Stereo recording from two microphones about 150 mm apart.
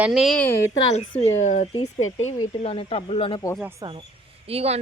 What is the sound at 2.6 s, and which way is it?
Speech, 40° left (ahead or behind).